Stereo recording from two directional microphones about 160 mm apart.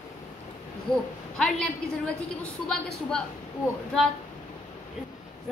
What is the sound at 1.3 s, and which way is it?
Speech, 5° left (ahead or behind).